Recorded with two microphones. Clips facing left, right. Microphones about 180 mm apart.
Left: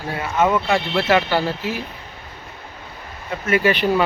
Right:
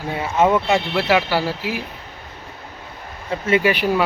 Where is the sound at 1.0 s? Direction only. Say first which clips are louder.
Even; 10° right (ahead or behind).